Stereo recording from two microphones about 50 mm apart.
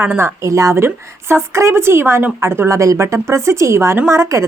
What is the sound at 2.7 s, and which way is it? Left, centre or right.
Speech, right.